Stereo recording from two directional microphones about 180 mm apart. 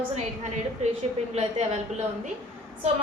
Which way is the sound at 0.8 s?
40° right (ahead or behind).